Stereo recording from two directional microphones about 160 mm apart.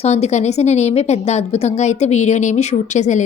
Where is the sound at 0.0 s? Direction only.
40° left (ahead or behind).